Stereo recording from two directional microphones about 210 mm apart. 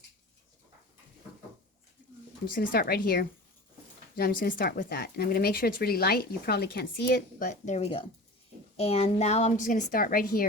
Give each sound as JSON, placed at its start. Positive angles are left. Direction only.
{"t": 2.5, "sound": "a woman's voice", "side_deg": 45}